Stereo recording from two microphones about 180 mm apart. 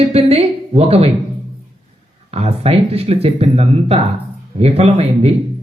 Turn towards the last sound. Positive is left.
turn(degrees=-35)  # may be behind; listen again after turning